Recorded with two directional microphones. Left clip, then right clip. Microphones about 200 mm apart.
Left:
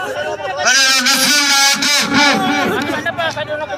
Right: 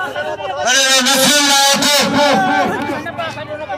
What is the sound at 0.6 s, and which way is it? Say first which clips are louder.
Guitar: even; 35° right (ahead or behind).